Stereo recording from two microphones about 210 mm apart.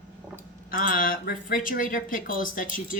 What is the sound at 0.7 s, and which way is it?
Speech, 40° left (ahead or behind).